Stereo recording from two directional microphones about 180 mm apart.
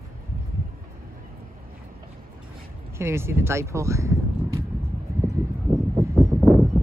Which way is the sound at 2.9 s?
15° right (ahead or behind).